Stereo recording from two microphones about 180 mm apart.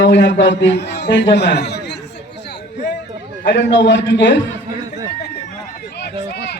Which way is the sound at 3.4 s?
85° left.